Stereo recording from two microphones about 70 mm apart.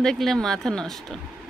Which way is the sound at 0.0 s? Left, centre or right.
Centre.